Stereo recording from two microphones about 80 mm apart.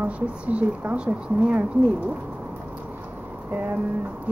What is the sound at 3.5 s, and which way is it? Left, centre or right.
Music, right.